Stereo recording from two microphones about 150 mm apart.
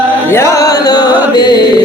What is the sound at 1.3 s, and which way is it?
Mantra, 30° left (ahead or behind).